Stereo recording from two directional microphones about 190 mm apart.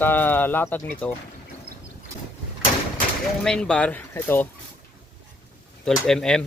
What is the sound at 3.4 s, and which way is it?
Speech, 5° left (ahead or behind).